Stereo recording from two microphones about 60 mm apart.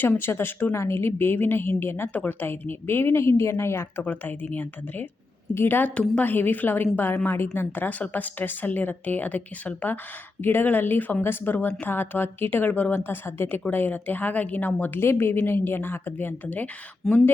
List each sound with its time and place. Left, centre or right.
0.0 s a woman's voice: left
4.0 s a woman's voice: left
5.9 s a woman's voice: centre
6.2 s a woman's voice: left
13.0 s a woman's voice: left
14.8 s a woman's voice: left
17.0 s speech: centre